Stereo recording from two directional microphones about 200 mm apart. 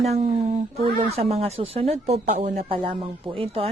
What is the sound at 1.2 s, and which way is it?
Speech, 30° right (ahead or behind).